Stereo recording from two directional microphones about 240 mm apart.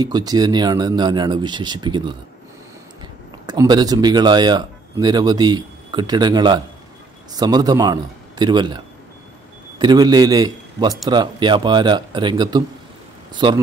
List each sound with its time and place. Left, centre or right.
0.0 s speech: centre
3.4 s a man's voice: centre